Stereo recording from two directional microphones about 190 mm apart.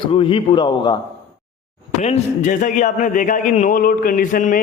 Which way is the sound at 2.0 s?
35° left (ahead or behind).